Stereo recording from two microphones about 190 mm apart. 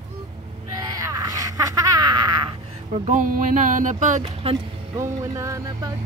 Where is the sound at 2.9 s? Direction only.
40° right (ahead or behind).